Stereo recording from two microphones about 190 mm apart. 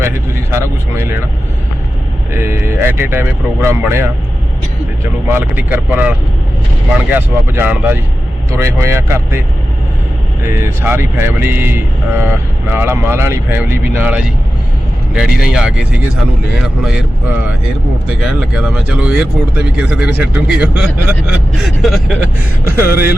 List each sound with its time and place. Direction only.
0.5 s speech: 15° right (ahead or behind)
2.3 s speech: 10° right (ahead or behind)
5.3 s speech: 10° right (ahead or behind)
10.5 s speech: 15° right (ahead or behind)
18.1 s speech: 5° right (ahead or behind)
22.6 s speech: 15° right (ahead or behind)